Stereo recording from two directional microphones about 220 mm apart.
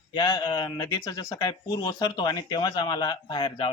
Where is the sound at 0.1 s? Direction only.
20° left (ahead or behind).